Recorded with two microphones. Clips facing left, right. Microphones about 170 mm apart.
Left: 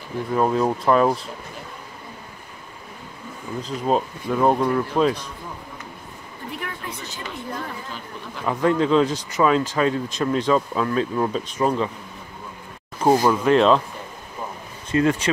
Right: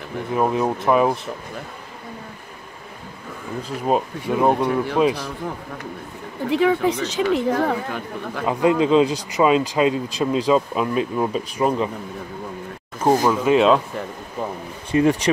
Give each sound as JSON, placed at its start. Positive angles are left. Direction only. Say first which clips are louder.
{"t": 0.3, "sound": "speech", "louder": "even", "side_deg": -15}
{"t": 3.6, "sound": "speech", "louder": "right 1 dB", "side_deg": -10}
{"t": 6.5, "sound": "speech", "louder": "right 17 dB", "side_deg": -90}
{"t": 8.5, "sound": "speech", "louder": "right 2 dB", "side_deg": -15}
{"t": 13.0, "sound": "speech", "louder": "even", "side_deg": 0}
{"t": 14.9, "sound": "speech", "louder": "right 2 dB", "side_deg": -15}